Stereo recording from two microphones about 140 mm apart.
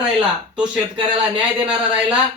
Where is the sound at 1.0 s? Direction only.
35° right (ahead or behind).